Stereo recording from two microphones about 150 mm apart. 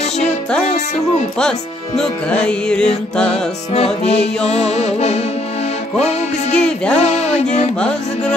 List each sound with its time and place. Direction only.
2.0 s music: 5° left (ahead or behind)
3.7 s music: 45° left (ahead or behind)
6.5 s music: 5° left (ahead or behind)
7.0 s music: 50° left (ahead or behind)